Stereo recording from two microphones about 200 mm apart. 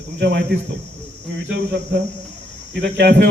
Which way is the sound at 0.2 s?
55° right (ahead or behind).